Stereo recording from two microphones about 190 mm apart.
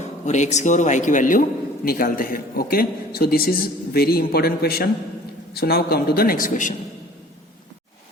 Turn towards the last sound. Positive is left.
turn(degrees=45)  # may be behind; listen again after turning